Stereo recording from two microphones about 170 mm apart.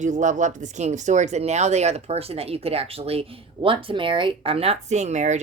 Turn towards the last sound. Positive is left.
turn(degrees=-45)  # may be behind; listen again after turning